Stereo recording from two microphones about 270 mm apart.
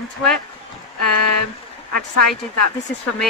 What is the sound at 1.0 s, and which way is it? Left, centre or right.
Speech, left.